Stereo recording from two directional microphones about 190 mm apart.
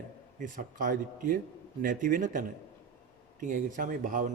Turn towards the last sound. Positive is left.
turn(degrees=-45)  # may be behind; listen again after turning